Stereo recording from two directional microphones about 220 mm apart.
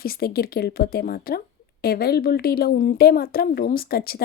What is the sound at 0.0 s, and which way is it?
A woman's voice, 45° left (ahead or behind).